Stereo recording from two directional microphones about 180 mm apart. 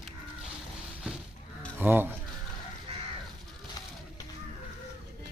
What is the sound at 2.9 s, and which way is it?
Crow, 35° right (ahead or behind).